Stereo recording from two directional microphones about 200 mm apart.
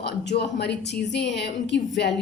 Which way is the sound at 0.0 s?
55° left (ahead or behind).